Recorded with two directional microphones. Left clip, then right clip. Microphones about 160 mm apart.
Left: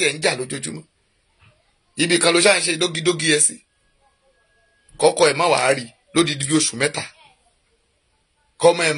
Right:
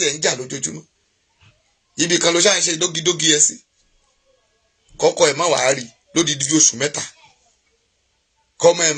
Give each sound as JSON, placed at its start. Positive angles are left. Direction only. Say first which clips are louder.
{"t": 0.0, "sound": "speech", "louder": "even", "side_deg": 15}
{"t": 2.0, "sound": "a man's voice", "louder": "even", "side_deg": 15}
{"t": 5.0, "sound": "a man's voice", "louder": "even", "side_deg": 20}
{"t": 8.5, "sound": "a man's voice", "louder": "right 1 dB", "side_deg": 20}